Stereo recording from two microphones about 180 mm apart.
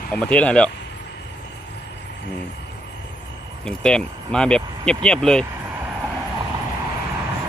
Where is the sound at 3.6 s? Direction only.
5° left (ahead or behind).